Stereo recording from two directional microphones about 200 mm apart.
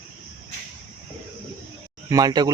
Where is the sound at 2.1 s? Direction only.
20° right (ahead or behind).